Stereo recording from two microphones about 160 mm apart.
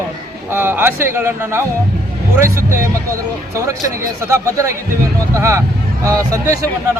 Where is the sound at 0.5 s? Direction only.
15° right (ahead or behind).